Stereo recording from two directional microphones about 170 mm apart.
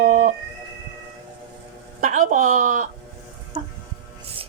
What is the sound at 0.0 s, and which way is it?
Cat, 55° right (ahead or behind).